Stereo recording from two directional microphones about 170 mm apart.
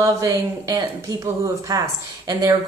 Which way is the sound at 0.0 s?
20° right (ahead or behind).